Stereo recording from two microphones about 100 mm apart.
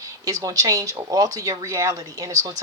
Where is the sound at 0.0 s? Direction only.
35° right (ahead or behind).